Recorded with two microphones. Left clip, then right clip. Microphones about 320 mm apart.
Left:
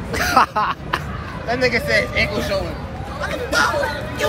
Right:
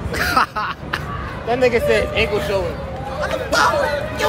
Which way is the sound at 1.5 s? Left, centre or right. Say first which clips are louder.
Right 2 dB; centre.